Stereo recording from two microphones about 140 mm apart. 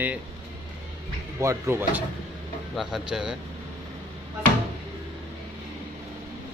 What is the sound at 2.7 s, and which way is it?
Speech, centre (ahead or behind).